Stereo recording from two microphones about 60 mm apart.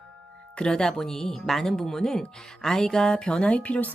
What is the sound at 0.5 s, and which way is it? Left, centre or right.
A woman's voice, centre.